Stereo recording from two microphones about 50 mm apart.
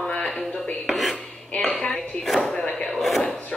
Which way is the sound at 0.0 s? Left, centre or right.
Centre.